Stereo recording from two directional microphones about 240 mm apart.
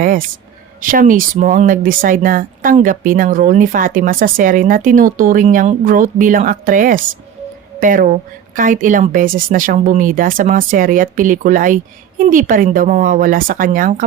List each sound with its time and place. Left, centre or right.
0.0 s speech: right